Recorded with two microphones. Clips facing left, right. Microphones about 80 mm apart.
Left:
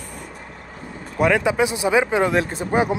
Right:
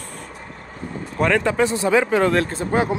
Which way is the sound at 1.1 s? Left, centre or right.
Centre.